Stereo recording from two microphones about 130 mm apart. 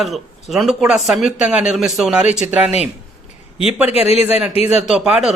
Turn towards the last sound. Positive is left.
turn(degrees=-5)  # may be behind; listen again after turning